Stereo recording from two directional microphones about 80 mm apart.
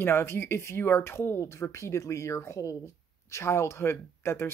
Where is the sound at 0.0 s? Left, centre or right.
Left.